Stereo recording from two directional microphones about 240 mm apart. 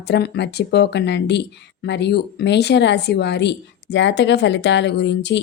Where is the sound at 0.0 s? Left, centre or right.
Left.